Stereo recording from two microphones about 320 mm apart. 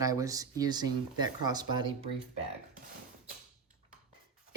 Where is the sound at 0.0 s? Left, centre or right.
Centre.